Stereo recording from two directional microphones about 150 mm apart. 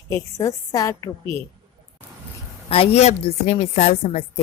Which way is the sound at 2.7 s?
45° left (ahead or behind).